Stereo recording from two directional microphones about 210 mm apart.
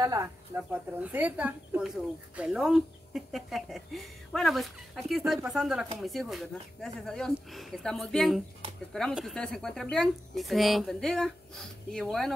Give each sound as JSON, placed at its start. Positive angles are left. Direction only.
{"t": 0.0, "sound": "speech", "side_deg": -15}